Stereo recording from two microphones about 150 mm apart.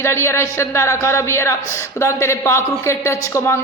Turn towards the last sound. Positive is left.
turn(degrees=20)  # may be behind; listen again after turning